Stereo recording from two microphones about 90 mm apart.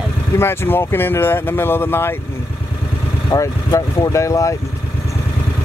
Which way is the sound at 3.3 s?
40° left (ahead or behind).